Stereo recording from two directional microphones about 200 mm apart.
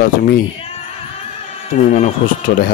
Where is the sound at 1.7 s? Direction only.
40° left (ahead or behind).